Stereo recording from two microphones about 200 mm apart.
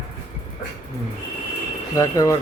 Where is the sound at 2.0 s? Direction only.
15° left (ahead or behind).